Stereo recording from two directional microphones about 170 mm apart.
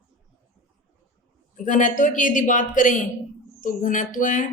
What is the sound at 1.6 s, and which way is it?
A woman's voice, 50° left (ahead or behind).